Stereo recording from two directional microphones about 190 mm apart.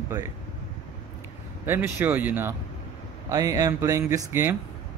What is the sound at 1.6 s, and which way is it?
Speech, 10° right (ahead or behind).